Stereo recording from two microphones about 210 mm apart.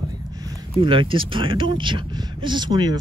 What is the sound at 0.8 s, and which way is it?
Speech, 25° right (ahead or behind).